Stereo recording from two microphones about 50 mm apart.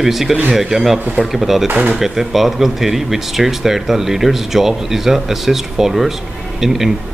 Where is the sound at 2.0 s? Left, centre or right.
Centre.